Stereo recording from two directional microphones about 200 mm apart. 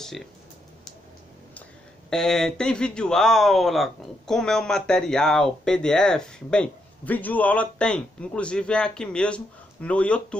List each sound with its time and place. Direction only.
0.0 s speech: centre (ahead or behind)
2.0 s speech: 5° left (ahead or behind)